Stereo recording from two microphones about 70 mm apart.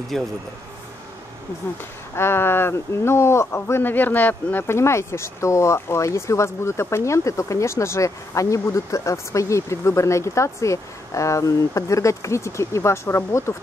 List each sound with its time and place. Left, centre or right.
0.1 s speech: centre
2.1 s speech: left
4.6 s speech: left